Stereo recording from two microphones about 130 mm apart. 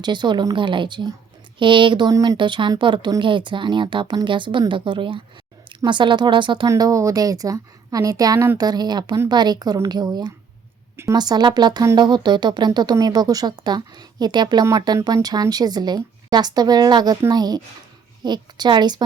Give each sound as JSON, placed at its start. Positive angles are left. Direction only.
{"t": 0.0, "sound": "speech", "side_deg": -35}
{"t": 2.4, "sound": "speech", "side_deg": -40}
{"t": 6.7, "sound": "a woman's voice", "side_deg": -25}